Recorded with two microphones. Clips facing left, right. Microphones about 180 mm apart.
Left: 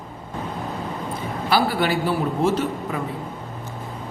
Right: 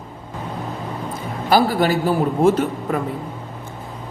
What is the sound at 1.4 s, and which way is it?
A man's voice, 45° right (ahead or behind).